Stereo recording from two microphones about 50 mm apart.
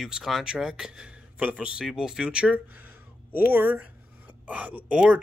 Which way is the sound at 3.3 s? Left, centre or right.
Right.